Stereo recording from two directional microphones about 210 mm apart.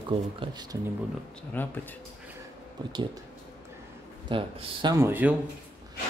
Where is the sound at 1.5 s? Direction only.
10° left (ahead or behind).